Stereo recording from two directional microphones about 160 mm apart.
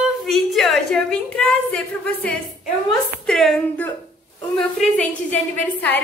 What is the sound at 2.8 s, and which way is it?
A woman's voice, centre (ahead or behind).